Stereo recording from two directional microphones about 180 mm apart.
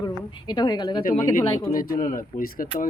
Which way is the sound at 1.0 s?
50° left (ahead or behind).